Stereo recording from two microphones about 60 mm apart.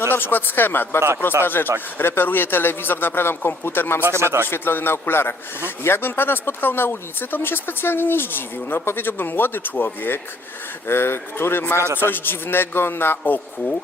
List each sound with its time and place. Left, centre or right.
0.1 s a man's voice: left
4.2 s speech: right
4.4 s a man's voice: left